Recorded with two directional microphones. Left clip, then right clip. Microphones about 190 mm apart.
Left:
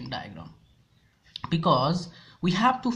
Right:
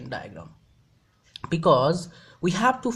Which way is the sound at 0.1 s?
30° right (ahead or behind).